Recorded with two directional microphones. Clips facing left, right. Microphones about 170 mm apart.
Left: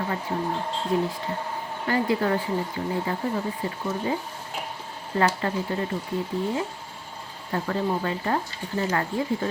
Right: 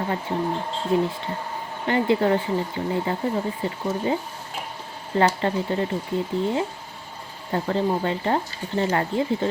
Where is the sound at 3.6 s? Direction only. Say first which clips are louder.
Right 3 dB; 25° right (ahead or behind).